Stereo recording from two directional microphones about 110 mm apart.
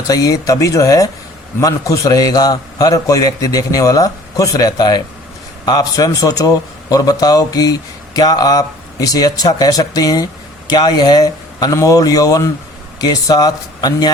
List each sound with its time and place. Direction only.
0.1 s a man's voice: 30° left (ahead or behind)